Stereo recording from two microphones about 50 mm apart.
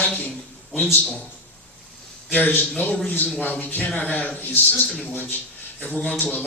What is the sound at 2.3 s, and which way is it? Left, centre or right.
A man's voice, left.